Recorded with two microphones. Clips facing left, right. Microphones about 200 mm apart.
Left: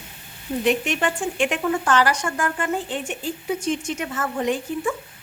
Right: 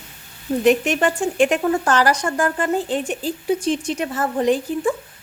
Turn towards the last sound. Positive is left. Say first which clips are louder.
# right 5 dB
turn(degrees=-35)  # may be behind; listen again after turning